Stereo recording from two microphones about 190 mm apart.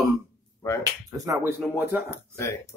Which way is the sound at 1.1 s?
15° right (ahead or behind).